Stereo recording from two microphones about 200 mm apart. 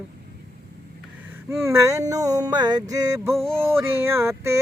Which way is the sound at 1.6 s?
15° right (ahead or behind).